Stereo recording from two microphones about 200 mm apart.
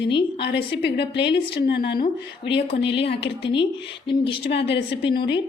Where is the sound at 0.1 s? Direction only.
25° left (ahead or behind).